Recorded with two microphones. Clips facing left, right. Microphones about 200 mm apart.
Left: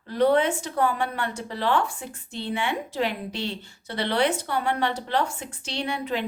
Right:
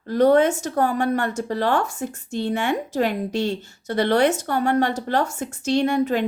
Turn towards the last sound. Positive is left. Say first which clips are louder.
# right 8 dB
turn(degrees=-45)  # may be behind; listen again after turning